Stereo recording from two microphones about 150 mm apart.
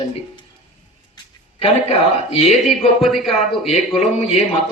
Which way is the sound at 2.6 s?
Centre (ahead or behind).